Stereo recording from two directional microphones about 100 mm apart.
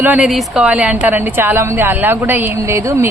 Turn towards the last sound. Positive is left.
turn(degrees=-30)  # may be behind; listen again after turning